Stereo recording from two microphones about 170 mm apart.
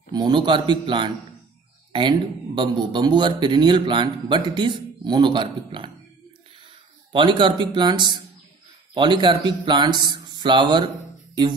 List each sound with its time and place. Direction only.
0.1 s speech: 25° right (ahead or behind)
7.1 s speech: 30° right (ahead or behind)